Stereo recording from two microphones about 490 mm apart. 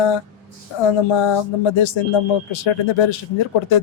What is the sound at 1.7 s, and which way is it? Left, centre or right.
Speech, left.